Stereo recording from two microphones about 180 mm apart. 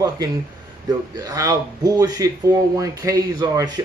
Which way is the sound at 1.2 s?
20° right (ahead or behind).